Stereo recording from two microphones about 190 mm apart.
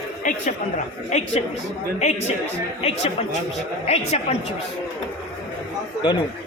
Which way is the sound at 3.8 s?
35° left (ahead or behind).